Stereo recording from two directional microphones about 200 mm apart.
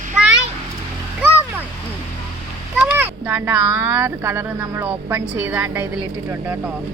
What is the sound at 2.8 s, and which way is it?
Speech, 10° right (ahead or behind).